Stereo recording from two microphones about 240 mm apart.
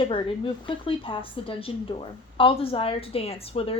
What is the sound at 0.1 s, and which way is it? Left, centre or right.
A woman's voice, left.